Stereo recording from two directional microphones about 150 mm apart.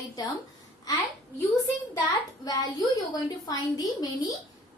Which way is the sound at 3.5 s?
25° left (ahead or behind).